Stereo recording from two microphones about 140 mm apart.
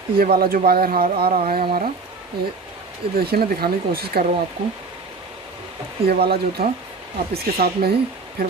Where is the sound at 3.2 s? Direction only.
90° right.